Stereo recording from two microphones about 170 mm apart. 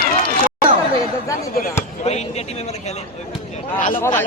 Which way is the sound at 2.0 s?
40° left (ahead or behind).